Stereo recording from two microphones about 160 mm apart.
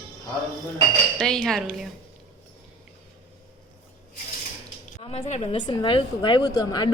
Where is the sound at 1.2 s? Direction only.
5° left (ahead or behind).